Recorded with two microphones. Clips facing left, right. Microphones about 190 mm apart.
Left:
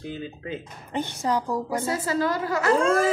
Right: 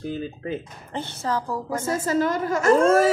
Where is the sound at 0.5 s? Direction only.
15° left (ahead or behind).